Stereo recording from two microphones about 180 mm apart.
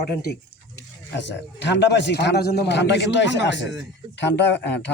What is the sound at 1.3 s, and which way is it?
A man's voice, 75° left (ahead or behind).